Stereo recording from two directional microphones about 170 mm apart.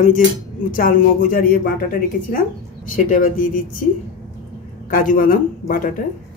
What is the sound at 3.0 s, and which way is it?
Speech, 55° left (ahead or behind).